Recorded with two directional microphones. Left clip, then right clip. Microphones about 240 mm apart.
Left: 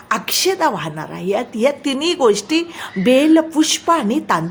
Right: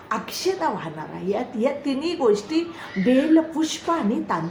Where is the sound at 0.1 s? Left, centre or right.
Left.